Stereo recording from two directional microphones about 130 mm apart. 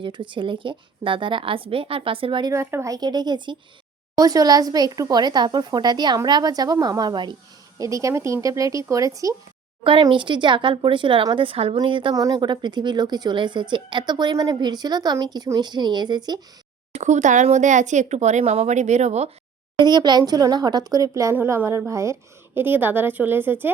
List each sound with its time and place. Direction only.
0.0 s a woman's voice: 40° right (ahead or behind)
2.5 s a woman's voice: 20° right (ahead or behind)
10.0 s a woman's voice: 40° right (ahead or behind)
12.1 s a woman's voice: 30° right (ahead or behind)
16.9 s speech: 65° right (ahead or behind)
19.8 s a woman's voice: 35° right (ahead or behind)
21.3 s a woman's voice: 15° right (ahead or behind)